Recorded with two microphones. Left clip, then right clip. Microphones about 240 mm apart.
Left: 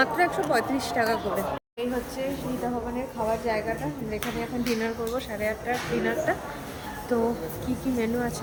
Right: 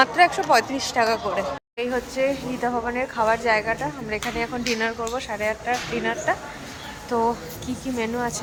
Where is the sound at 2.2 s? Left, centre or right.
Centre.